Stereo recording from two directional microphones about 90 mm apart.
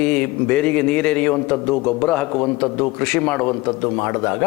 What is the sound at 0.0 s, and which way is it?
A man's voice, 15° left (ahead or behind).